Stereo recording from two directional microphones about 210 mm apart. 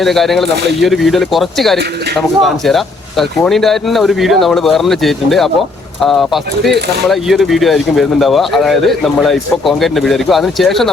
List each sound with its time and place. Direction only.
0.0 s speech: centre (ahead or behind)
6.7 s speech: 50° right (ahead or behind)
7.1 s speech: centre (ahead or behind)